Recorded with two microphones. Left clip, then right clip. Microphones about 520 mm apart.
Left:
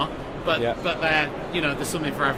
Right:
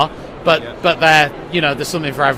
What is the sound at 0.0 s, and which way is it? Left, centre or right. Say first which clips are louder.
A man's voice: right 10 dB; right.